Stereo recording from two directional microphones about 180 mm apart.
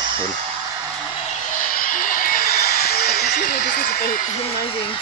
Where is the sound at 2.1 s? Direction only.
50° left (ahead or behind).